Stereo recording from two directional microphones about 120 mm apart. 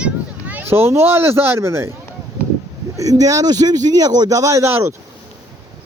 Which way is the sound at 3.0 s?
30° right (ahead or behind).